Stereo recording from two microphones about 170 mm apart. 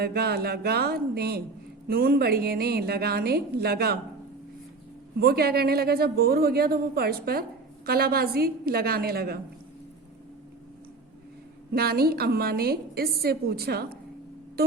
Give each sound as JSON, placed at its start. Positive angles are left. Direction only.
{"t": 0.0, "sound": "a woman's voice", "side_deg": -70}
{"t": 5.2, "sound": "a woman's voice", "side_deg": -65}
{"t": 11.7, "sound": "a woman's voice", "side_deg": -65}